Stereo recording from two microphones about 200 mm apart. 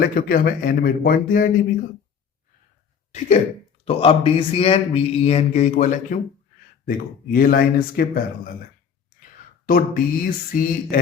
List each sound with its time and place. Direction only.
0.0 s speech: 45° left (ahead or behind)
3.1 s speech: 35° left (ahead or behind)
9.6 s speech: 45° left (ahead or behind)